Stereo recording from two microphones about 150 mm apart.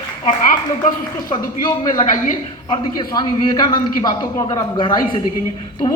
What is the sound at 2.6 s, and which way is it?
A man's voice, 25° left (ahead or behind).